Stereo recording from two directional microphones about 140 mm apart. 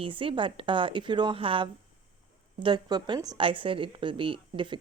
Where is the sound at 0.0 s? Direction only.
40° right (ahead or behind).